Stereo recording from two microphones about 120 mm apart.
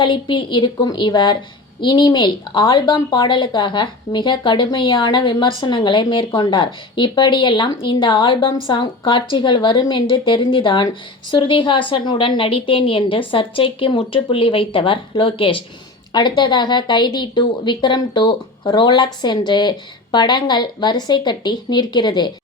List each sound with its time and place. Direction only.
0.0 s a woman's voice: 45° left (ahead or behind)